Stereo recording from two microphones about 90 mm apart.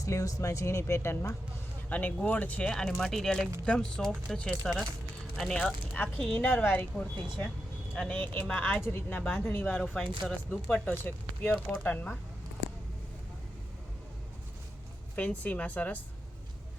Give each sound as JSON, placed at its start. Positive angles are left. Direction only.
{"t": 0.0, "sound": "speech", "side_deg": 40}
{"t": 1.9, "sound": "speech", "side_deg": 20}
{"t": 2.7, "sound": "speech", "side_deg": 5}
{"t": 5.9, "sound": "speech", "side_deg": 15}
{"t": 8.1, "sound": "speech", "side_deg": 20}
{"t": 8.8, "sound": "speech", "side_deg": 30}
{"t": 9.0, "sound": "speech", "side_deg": 15}
{"t": 15.1, "sound": "speech", "side_deg": 15}